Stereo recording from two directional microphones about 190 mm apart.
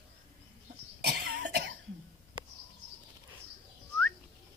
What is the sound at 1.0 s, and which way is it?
Cough, 65° right (ahead or behind).